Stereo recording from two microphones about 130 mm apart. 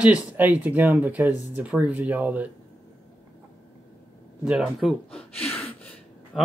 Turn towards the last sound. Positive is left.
turn(degrees=0)  # may be behind; listen again after turning